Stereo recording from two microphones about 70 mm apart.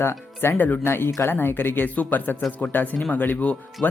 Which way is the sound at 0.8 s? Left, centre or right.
Left.